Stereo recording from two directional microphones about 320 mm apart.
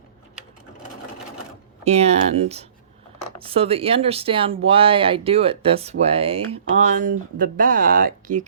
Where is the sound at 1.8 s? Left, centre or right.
Centre.